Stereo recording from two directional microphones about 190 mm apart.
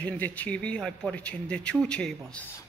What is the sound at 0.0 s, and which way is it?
Speech, 10° left (ahead or behind).